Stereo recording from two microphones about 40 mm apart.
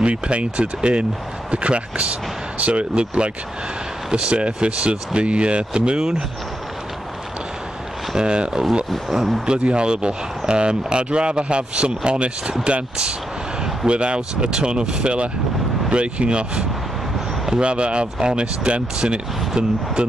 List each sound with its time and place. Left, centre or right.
0.0 s speech: right
8.1 s speech: right
9.1 s speech: centre
9.5 s speech: right
13.8 s speech: right